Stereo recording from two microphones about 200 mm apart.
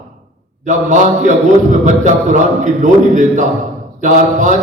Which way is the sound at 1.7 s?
40° right (ahead or behind).